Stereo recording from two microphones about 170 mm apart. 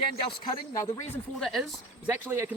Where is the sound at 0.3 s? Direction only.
25° left (ahead or behind).